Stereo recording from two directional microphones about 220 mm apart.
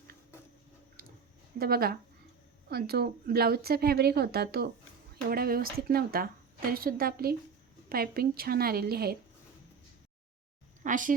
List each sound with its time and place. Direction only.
1.0 s a sound: 40° right (ahead or behind)
1.5 s a woman's voice: 45° right (ahead or behind)
10.8 s a woman's voice: 35° right (ahead or behind)